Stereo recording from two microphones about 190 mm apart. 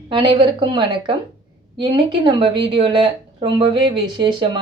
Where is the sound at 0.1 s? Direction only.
25° right (ahead or behind).